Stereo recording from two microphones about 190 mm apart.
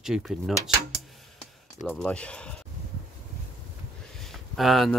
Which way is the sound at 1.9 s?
5° left (ahead or behind).